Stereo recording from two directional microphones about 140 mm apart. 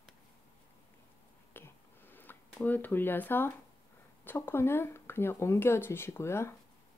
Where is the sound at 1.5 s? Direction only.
15° left (ahead or behind).